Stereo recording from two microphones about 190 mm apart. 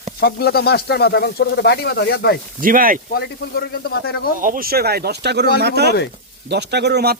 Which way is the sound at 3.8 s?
55° left (ahead or behind).